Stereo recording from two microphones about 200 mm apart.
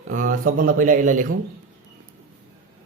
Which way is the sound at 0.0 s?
40° right (ahead or behind).